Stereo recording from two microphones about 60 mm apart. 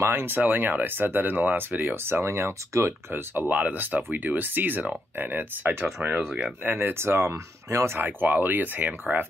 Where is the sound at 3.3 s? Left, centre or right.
Right.